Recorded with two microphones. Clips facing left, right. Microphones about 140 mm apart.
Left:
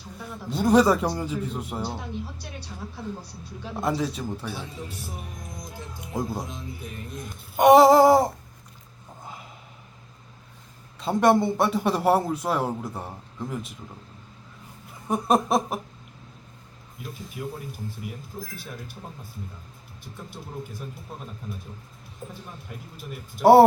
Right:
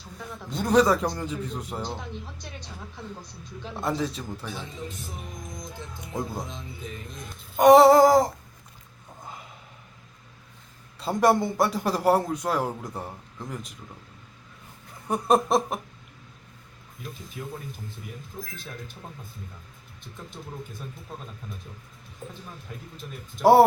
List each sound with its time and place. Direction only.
0.5 s a man's voice: 5° left (ahead or behind)
6.1 s a man's voice: 10° left (ahead or behind)
11.0 s a man's voice: centre (ahead or behind)
15.0 s a man's voice: 5° left (ahead or behind)
17.4 s speech: 10° left (ahead or behind)
18.3 s speech: 30° left (ahead or behind)
23.4 s a man's voice: centre (ahead or behind)